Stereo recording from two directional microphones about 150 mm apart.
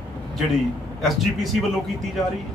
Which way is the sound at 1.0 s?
Centre (ahead or behind).